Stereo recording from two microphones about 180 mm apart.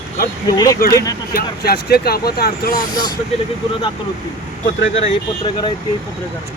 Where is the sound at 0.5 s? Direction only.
20° left (ahead or behind).